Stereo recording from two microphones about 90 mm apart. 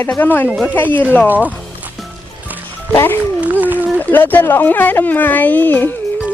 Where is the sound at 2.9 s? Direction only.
25° left (ahead or behind).